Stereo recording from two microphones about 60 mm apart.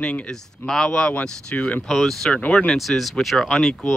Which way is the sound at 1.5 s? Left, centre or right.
Left.